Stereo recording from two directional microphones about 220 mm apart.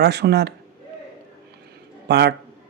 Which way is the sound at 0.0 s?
50° right (ahead or behind).